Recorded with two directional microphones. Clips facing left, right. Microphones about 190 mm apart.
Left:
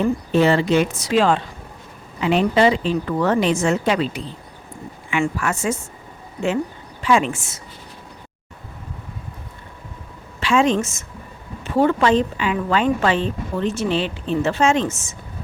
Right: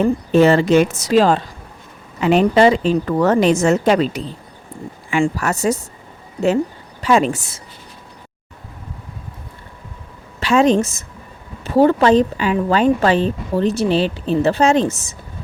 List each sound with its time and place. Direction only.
0.0 s speech: 45° right (ahead or behind)
7.0 s speech: 40° right (ahead or behind)
10.4 s speech: 40° right (ahead or behind)